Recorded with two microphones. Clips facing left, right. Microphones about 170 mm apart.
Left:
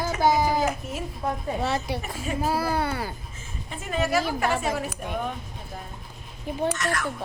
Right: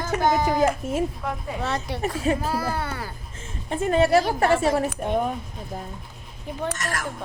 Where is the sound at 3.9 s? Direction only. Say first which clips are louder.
Right 6 dB; 30° right (ahead or behind).